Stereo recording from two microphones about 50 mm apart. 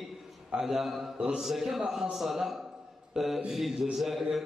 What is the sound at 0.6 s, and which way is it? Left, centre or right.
Speech, centre.